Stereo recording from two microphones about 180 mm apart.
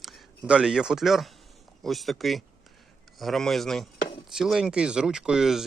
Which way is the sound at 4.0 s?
30° left (ahead or behind).